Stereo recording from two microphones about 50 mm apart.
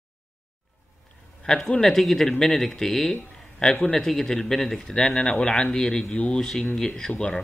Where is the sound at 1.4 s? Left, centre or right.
Centre.